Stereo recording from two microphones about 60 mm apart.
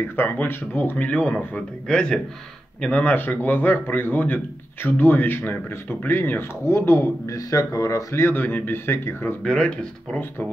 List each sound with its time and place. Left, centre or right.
0.1 s speech: left
0.9 s speech: left
1.9 s speech: centre
2.9 s speech: left
6.8 s speech: left
7.2 s speech: left
8.3 s speech: left
9.4 s speech: centre